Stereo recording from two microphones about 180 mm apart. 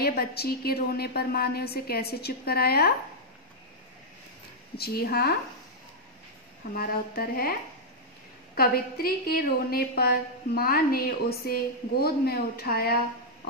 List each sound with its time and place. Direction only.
0.0 s a woman's voice: 60° left (ahead or behind)
4.7 s a woman's voice: 60° left (ahead or behind)
6.7 s a woman's voice: 55° left (ahead or behind)
8.5 s a woman's voice: 55° left (ahead or behind)